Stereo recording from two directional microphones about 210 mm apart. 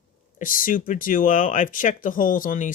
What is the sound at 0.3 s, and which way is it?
Speech, 40° left (ahead or behind).